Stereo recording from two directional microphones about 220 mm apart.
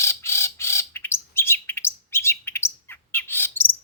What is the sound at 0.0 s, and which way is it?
Bird, 10° left (ahead or behind).